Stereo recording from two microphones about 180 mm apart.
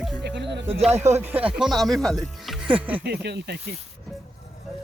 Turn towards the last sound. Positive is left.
turn(degrees=-65)  # may be behind; listen again after turning